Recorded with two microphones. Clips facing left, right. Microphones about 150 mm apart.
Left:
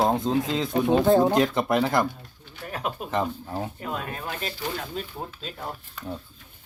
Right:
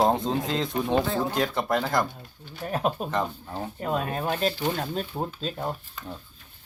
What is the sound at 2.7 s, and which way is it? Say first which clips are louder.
Speech: right 5 dB; 30° right (ahead or behind).